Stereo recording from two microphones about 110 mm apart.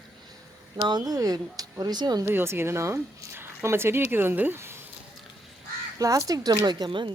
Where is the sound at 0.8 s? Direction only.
40° right (ahead or behind).